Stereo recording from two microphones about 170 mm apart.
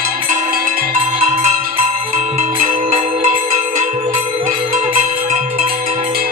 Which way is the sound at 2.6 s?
40° right (ahead or behind).